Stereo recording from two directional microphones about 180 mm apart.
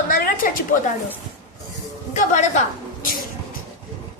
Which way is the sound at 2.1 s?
40° left (ahead or behind).